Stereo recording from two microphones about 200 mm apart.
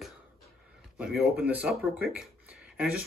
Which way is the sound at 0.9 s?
5° right (ahead or behind).